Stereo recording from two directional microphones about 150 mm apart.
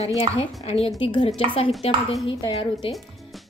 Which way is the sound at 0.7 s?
40° left (ahead or behind).